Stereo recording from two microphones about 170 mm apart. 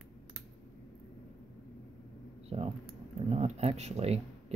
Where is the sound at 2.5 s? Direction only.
35° right (ahead or behind).